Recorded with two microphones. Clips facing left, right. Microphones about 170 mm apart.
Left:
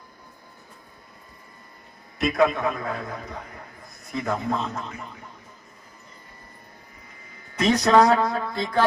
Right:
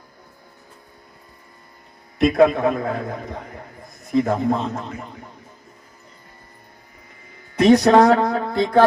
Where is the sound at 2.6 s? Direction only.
50° right (ahead or behind).